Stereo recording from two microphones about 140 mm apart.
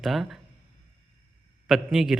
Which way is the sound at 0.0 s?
Centre (ahead or behind).